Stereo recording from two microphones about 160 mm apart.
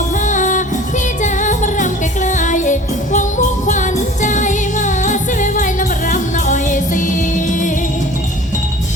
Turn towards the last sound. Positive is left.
turn(degrees=50)  # may be behind; listen again after turning